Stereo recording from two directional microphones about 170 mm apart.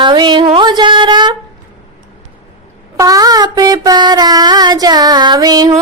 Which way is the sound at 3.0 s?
20° right (ahead or behind).